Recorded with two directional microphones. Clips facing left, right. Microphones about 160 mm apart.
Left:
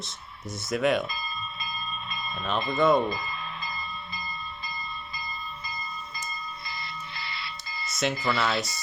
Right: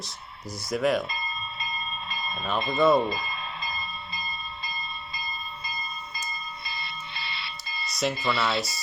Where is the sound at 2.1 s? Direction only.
35° right (ahead or behind).